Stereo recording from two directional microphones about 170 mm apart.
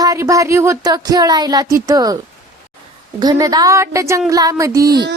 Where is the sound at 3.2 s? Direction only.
20° right (ahead or behind).